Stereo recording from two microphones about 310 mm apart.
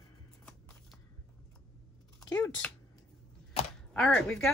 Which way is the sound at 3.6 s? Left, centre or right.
Left.